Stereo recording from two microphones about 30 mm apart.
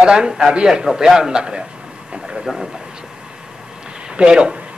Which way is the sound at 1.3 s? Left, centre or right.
Right.